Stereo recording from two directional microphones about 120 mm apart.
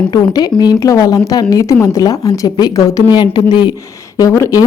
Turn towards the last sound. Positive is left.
turn(degrees=25)  # may be behind; listen again after turning